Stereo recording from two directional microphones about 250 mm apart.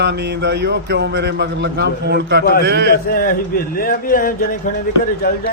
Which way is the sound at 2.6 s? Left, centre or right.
Right.